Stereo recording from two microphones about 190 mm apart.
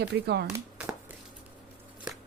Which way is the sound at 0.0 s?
60° right (ahead or behind).